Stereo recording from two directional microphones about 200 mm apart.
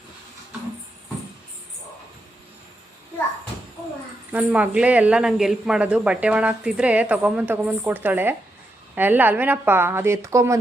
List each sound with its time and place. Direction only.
4.3 s a woman's voice: 5° right (ahead or behind)